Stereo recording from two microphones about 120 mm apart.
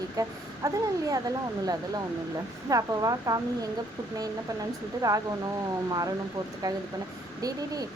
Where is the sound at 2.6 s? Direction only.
30° right (ahead or behind).